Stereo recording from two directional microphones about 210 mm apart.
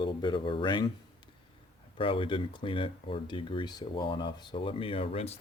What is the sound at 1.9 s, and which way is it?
Speech, 25° left (ahead or behind).